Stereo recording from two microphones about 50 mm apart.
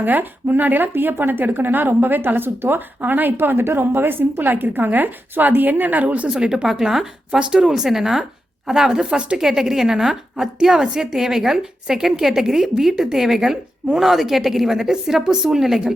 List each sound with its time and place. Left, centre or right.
0.0 s speech: right
6.2 s a woman's voice: centre
7.3 s speech: right
7.6 s a woman's voice: centre